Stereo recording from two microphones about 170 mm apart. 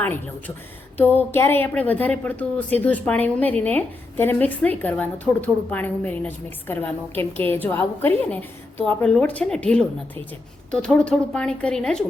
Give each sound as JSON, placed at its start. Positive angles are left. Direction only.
{"t": 0.0, "sound": "speech", "side_deg": 10}